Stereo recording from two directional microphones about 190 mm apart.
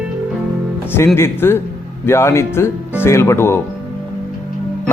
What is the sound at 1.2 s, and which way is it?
Speech, 10° left (ahead or behind).